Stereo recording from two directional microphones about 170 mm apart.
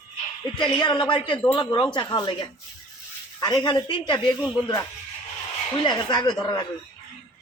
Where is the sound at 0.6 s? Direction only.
25° left (ahead or behind).